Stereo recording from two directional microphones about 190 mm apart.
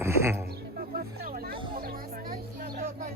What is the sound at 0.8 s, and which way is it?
Music, 50° right (ahead or behind).